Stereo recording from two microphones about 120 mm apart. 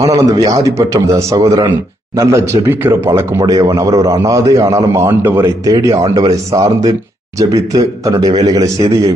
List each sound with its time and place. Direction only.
0.0 s a man's voice: 30° right (ahead or behind)
8.3 s a man's voice: 45° right (ahead or behind)
8.5 s a man's voice: 30° right (ahead or behind)